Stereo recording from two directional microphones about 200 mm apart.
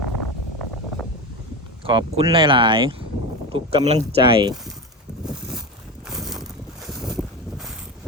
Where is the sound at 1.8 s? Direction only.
25° right (ahead or behind).